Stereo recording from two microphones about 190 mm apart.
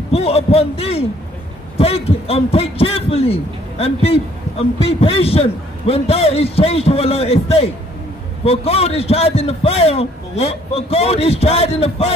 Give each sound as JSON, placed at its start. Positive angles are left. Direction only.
{"t": 0.1, "sound": "a man's voice", "side_deg": 30}